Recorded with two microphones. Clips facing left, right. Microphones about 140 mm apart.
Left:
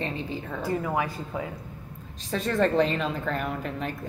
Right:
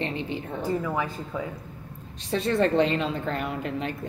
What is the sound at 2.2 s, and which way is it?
A woman's voice, 30° right (ahead or behind).